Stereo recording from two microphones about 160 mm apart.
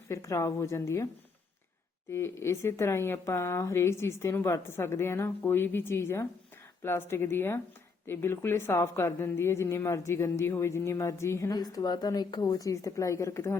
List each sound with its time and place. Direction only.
0.1 s a woman's voice: 20° left (ahead or behind)
2.0 s a woman's voice: 15° left (ahead or behind)